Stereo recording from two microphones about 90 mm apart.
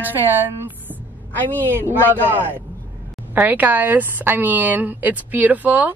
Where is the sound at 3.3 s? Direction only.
20° right (ahead or behind).